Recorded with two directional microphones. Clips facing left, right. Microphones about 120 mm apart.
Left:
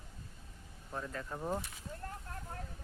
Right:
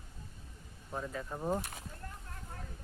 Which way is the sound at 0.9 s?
10° right (ahead or behind).